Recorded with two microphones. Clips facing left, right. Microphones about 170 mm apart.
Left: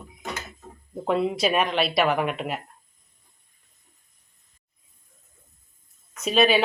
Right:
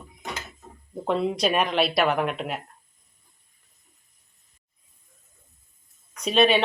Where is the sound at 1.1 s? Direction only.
5° left (ahead or behind).